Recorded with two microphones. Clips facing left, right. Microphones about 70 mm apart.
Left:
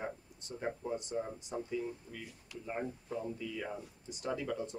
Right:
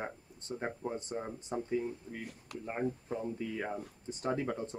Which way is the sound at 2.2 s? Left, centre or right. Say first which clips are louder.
Right 5 dB; right.